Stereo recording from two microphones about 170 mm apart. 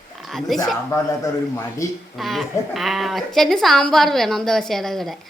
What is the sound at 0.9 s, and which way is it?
A man's voice, 15° left (ahead or behind).